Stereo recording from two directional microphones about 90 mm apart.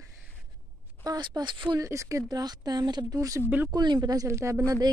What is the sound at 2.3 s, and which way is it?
A woman's voice, 45° right (ahead or behind).